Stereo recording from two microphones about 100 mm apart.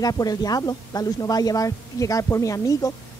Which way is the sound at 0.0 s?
40° left (ahead or behind).